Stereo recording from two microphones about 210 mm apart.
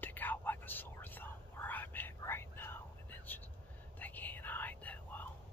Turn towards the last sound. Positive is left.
turn(degrees=5)  # may be behind; listen again after turning